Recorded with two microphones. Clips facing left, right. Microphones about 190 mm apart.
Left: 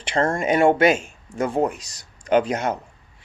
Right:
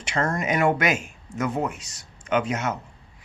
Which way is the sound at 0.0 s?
30° left (ahead or behind).